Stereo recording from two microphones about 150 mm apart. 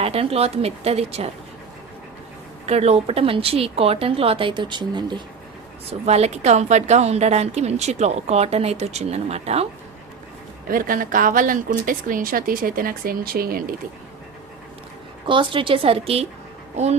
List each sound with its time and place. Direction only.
0.0 s speech: 40° right (ahead or behind)
2.6 s speech: 45° right (ahead or behind)
5.9 s a woman's voice: 45° right (ahead or behind)
10.7 s a woman's voice: 70° right (ahead or behind)
15.3 s a woman's voice: 35° right (ahead or behind)